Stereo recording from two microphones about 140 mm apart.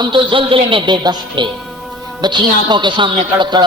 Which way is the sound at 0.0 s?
35° right (ahead or behind).